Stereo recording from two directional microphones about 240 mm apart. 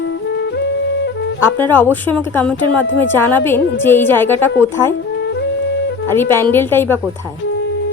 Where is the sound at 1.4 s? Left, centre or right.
Centre.